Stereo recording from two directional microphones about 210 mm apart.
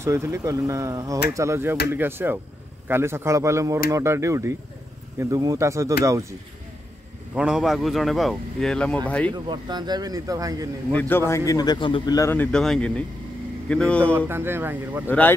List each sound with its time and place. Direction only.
0.0 s speech: 15° right (ahead or behind)
7.3 s speech: 5° right (ahead or behind)
9.3 s speech: 20° right (ahead or behind)
10.9 s speech: 10° left (ahead or behind)
14.1 s speech: 10° right (ahead or behind)
15.0 s speech: 10° left (ahead or behind)